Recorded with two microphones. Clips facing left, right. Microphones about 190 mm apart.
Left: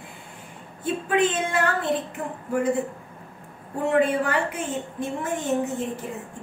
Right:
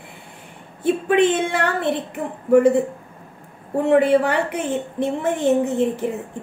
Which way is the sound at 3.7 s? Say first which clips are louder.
Right 6 dB; 65° right (ahead or behind).